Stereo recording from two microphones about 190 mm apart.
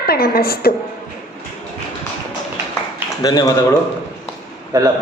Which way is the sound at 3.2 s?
20° left (ahead or behind).